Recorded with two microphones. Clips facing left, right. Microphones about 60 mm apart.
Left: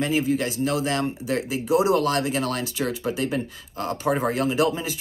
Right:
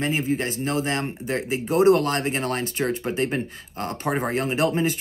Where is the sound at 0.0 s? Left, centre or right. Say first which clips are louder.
Left 1 dB; right.